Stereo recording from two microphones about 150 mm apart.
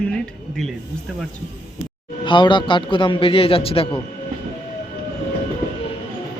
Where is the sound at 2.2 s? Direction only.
30° left (ahead or behind).